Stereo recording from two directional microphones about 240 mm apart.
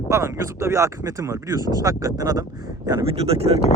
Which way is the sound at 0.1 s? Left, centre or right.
Centre.